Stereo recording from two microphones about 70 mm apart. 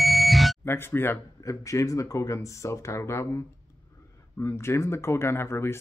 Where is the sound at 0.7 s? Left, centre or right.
Left.